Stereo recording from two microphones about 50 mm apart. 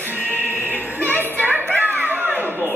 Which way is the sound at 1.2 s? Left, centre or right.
Right.